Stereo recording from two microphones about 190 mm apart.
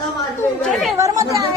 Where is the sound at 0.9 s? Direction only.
15° right (ahead or behind).